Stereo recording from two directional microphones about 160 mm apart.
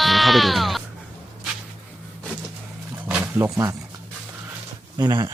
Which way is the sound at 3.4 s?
20° right (ahead or behind).